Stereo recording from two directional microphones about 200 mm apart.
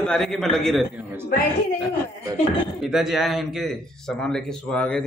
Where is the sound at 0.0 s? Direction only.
Centre (ahead or behind).